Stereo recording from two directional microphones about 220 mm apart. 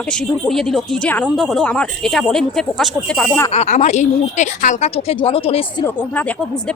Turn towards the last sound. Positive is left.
turn(degrees=5)  # may be behind; listen again after turning